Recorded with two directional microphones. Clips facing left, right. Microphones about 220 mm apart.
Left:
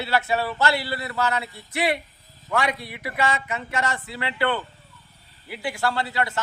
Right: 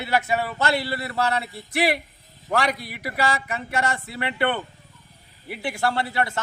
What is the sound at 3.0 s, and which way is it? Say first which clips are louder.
A man's voice: even; 35° right (ahead or behind).